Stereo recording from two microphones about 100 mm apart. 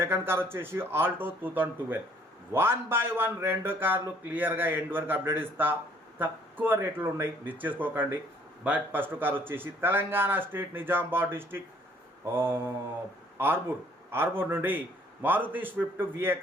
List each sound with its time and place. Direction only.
0.0 s a man's voice: 25° right (ahead or behind)